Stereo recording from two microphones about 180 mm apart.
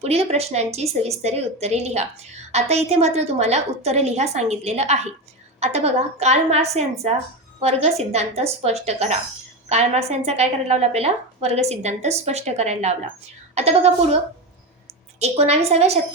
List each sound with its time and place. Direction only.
0.0 s a woman's voice: 35° right (ahead or behind)
15.2 s a woman's voice: 35° right (ahead or behind)